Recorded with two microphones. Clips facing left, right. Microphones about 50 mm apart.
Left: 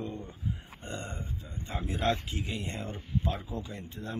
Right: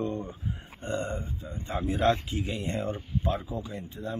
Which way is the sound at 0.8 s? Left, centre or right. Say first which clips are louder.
Right 10 dB; right.